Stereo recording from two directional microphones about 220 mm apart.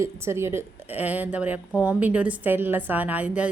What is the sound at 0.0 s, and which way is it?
A woman's voice, 10° right (ahead or behind).